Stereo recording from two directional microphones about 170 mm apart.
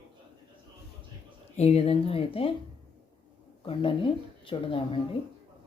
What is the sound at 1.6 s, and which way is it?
Speech, 35° left (ahead or behind).